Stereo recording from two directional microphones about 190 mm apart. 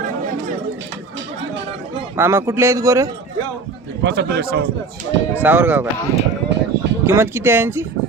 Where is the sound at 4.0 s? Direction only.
60° right (ahead or behind).